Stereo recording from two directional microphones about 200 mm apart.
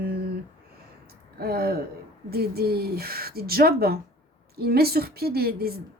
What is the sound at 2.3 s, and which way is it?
Speech, 50° right (ahead or behind).